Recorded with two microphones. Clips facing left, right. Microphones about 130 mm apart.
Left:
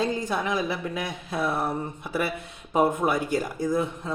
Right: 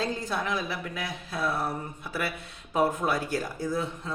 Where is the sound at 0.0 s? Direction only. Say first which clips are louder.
Left 4 dB; 20° left (ahead or behind).